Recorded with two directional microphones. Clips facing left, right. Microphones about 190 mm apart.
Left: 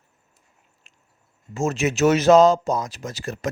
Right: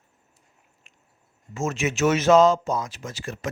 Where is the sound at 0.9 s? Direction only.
35° left (ahead or behind).